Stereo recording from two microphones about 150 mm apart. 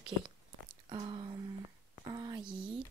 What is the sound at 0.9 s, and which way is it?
Speech, 30° right (ahead or behind).